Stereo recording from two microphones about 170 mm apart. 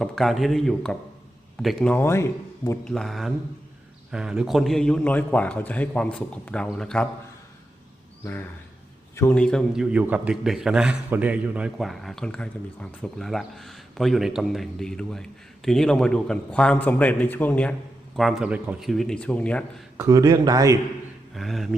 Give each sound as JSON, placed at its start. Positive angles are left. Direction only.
{"t": 0.0, "sound": "a man's voice", "side_deg": 0}
{"t": 2.8, "sound": "a man's voice", "side_deg": 0}
{"t": 8.2, "sound": "a man's voice", "side_deg": 10}
{"t": 20.0, "sound": "speech", "side_deg": -20}
{"t": 21.3, "sound": "a man's voice", "side_deg": 0}